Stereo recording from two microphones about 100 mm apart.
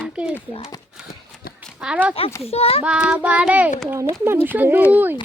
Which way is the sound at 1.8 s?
10° right (ahead or behind).